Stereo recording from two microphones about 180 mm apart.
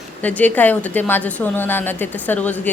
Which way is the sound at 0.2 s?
10° left (ahead or behind).